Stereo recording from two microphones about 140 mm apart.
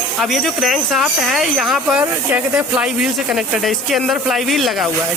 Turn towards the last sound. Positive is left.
turn(degrees=0)  # may be behind; listen again after turning